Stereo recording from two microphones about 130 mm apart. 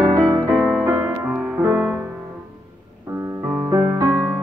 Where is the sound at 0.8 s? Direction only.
15° right (ahead or behind).